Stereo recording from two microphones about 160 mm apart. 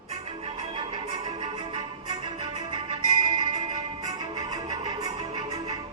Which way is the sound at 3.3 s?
25° right (ahead or behind).